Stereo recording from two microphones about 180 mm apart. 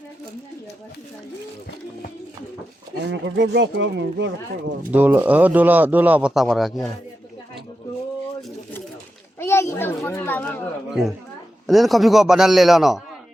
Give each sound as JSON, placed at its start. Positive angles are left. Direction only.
{"t": 3.1, "sound": "speech", "side_deg": -80}
{"t": 4.9, "sound": "a man's voice", "side_deg": -10}
{"t": 8.4, "sound": "pigeon", "side_deg": 0}
{"t": 9.4, "sound": "a child's voice", "side_deg": 15}
{"t": 11.6, "sound": "a man's voice", "side_deg": 0}